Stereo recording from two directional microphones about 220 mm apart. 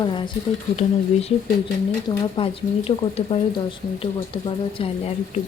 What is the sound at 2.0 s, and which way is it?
Speech, 25° left (ahead or behind).